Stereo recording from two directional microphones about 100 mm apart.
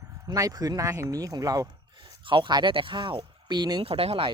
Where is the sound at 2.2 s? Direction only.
55° right (ahead or behind).